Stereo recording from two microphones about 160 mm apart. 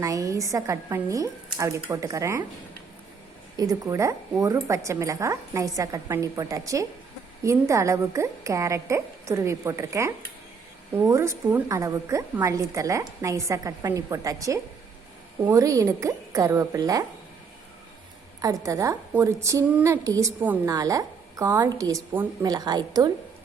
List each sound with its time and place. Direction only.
0.0 s a woman's voice: 20° right (ahead or behind)
3.6 s a woman's voice: 20° right (ahead or behind)
18.4 s a woman's voice: 20° right (ahead or behind)